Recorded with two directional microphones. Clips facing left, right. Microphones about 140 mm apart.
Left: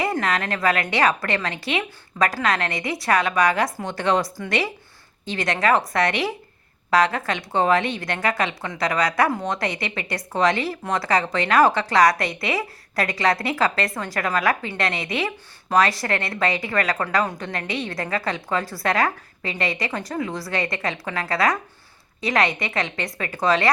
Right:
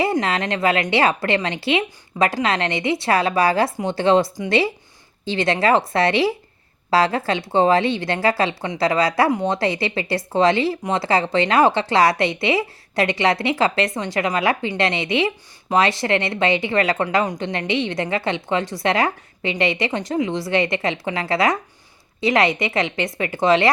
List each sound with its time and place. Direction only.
0.0 s a woman's voice: 25° right (ahead or behind)